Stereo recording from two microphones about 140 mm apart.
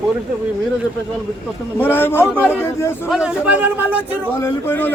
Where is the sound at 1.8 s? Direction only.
15° left (ahead or behind).